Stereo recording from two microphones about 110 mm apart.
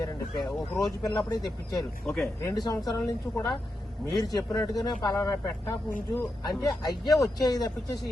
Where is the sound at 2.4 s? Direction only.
35° left (ahead or behind).